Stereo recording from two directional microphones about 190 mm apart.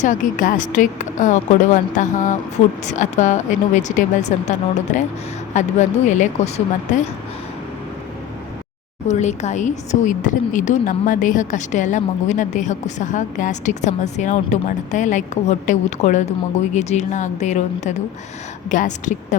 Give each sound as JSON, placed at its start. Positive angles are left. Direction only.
{"t": 0.0, "sound": "speech", "side_deg": 40}
{"t": 9.0, "sound": "speech", "side_deg": 35}